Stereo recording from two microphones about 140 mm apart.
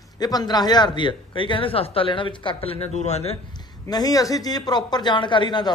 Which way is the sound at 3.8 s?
25° left (ahead or behind).